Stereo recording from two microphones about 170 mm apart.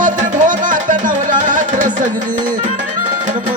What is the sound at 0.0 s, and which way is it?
Music, 50° right (ahead or behind).